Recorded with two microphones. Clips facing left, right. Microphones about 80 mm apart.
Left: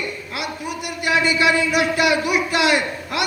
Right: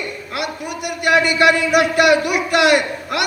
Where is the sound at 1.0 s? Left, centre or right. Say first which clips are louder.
Right 4 dB; right.